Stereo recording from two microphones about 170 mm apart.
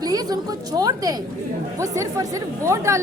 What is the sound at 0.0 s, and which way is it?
A woman's voice, 20° right (ahead or behind).